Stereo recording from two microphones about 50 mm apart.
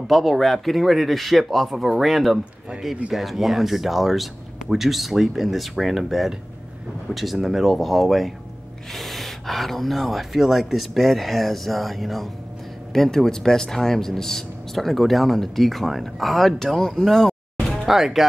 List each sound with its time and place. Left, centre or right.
0.1 s speech: centre